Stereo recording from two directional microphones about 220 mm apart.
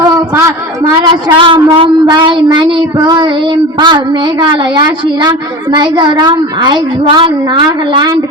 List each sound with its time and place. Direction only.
0.3 s a man's voice: 15° right (ahead or behind)